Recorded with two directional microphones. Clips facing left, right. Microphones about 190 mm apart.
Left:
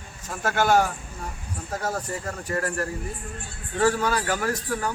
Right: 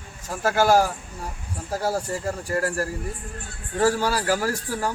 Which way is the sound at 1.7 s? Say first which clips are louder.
Right 4 dB; 30° right (ahead or behind).